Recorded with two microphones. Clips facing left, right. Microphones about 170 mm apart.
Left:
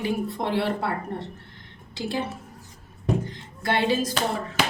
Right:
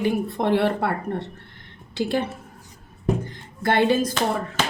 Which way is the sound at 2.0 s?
60° right (ahead or behind).